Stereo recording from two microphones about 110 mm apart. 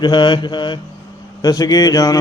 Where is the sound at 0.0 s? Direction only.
45° left (ahead or behind).